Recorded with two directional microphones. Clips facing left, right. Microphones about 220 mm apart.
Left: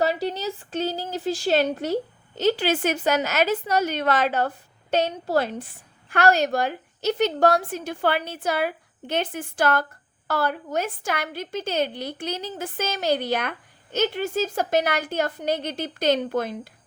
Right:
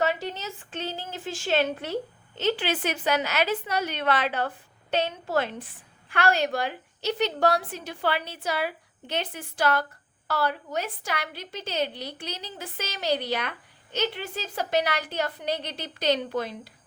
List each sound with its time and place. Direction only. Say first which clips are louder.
0.0 s a woman's voice: left 4 dB; 35° left (ahead or behind)